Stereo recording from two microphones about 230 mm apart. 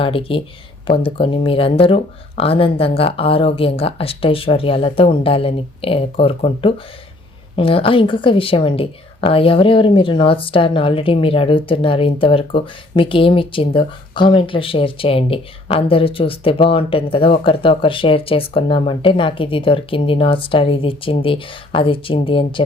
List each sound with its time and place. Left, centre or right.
0.0 s a woman's voice: left